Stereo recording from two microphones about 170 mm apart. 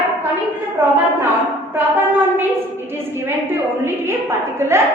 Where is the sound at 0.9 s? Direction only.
10° right (ahead or behind).